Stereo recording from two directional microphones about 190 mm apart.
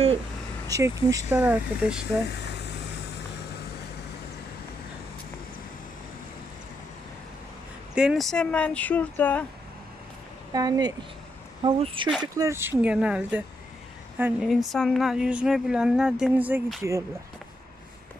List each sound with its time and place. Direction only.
0.7 s speech: 15° right (ahead or behind)
7.9 s speech: 5° right (ahead or behind)
10.5 s speech: 20° right (ahead or behind)